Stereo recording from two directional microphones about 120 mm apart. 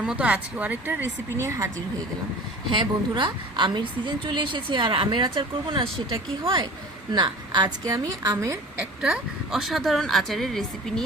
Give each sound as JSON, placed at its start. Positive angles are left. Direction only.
{"t": 0.0, "sound": "speech", "side_deg": -10}
{"t": 2.7, "sound": "a woman's voice", "side_deg": -40}
{"t": 8.8, "sound": "speech", "side_deg": -5}